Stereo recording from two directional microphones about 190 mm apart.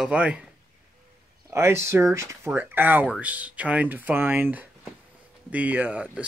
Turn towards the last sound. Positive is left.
turn(degrees=-5)  # may be behind; listen again after turning